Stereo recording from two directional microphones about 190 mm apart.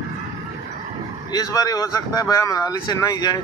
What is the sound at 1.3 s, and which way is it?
Speech, 20° left (ahead or behind).